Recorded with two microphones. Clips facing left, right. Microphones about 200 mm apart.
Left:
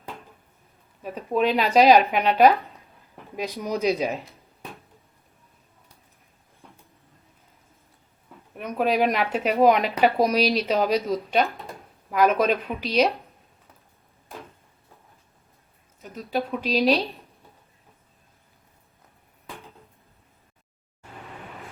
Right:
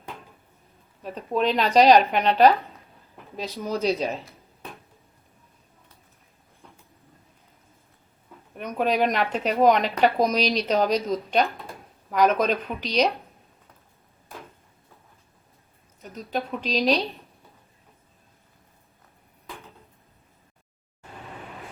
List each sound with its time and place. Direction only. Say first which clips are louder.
1.0 s speech: left 1 dB; 10° left (ahead or behind)
8.5 s speech: left 1 dB; centre (ahead or behind)
16.0 s speech: left 2 dB; centre (ahead or behind)